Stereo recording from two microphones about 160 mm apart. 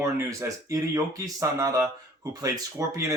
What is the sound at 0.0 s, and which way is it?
Speech, 20° right (ahead or behind).